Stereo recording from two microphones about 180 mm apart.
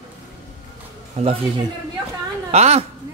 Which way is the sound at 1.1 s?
35° right (ahead or behind).